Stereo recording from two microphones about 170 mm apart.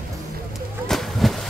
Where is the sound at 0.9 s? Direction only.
Centre (ahead or behind).